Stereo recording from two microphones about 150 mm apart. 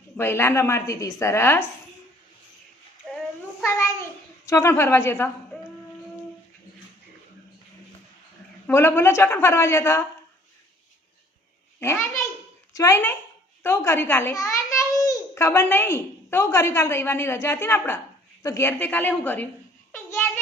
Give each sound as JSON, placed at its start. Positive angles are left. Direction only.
{"t": 0.2, "sound": "a woman's voice", "side_deg": 15}
{"t": 3.6, "sound": "child singing", "side_deg": 15}
{"t": 4.4, "sound": "a woman's voice", "side_deg": 15}
{"t": 8.6, "sound": "a woman's voice", "side_deg": 15}
{"t": 11.8, "sound": "a child's voice", "side_deg": 15}
{"t": 19.9, "sound": "a sound", "side_deg": 15}